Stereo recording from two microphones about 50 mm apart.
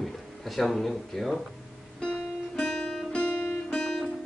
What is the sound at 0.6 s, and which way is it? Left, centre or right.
Speech, centre.